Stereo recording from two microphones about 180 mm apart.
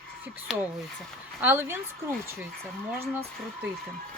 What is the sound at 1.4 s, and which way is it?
Speech, 10° right (ahead or behind).